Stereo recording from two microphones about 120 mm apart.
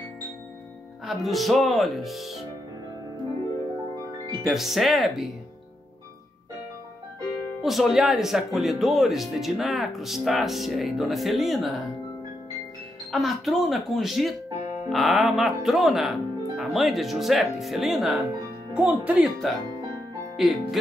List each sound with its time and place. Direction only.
1.0 s speech: centre (ahead or behind)
4.5 s speech: centre (ahead or behind)
7.6 s speech: centre (ahead or behind)
13.1 s speech: centre (ahead or behind)